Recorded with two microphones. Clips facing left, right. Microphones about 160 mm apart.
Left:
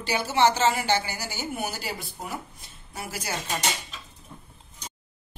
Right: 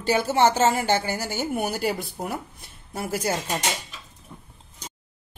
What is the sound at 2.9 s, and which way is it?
Speech, 50° right (ahead or behind).